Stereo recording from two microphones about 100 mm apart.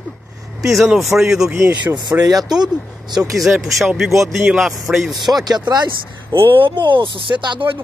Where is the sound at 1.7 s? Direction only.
50° right (ahead or behind).